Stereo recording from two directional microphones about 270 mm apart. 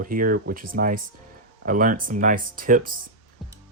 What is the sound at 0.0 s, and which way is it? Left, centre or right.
Speech, right.